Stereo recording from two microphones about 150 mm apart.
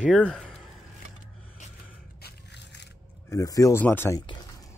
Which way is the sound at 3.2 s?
20° left (ahead or behind).